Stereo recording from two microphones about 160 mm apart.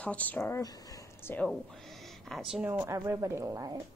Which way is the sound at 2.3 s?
Centre (ahead or behind).